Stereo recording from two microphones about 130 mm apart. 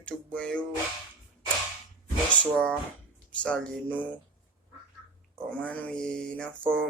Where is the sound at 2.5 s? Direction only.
5° left (ahead or behind).